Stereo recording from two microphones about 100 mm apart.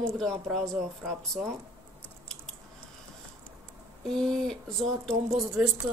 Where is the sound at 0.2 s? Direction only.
5° left (ahead or behind).